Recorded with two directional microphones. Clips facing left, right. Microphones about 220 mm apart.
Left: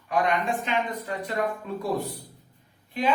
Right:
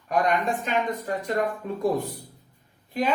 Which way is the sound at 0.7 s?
45° right (ahead or behind).